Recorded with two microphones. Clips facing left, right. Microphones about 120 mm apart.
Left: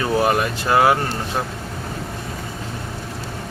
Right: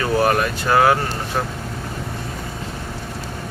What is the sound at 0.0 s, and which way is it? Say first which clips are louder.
Speech: right 1 dB; 15° left (ahead or behind).